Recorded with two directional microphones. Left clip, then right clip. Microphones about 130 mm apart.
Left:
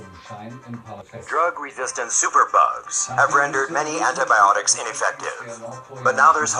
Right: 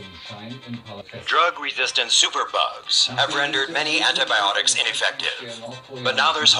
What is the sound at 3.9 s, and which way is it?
Speech, 5° right (ahead or behind).